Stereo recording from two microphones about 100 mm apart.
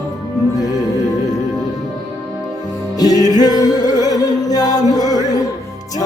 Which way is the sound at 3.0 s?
40° left (ahead or behind).